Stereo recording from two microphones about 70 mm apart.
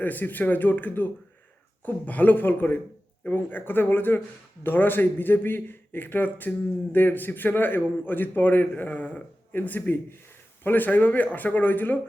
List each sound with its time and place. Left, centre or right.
0.0 s a man's voice: left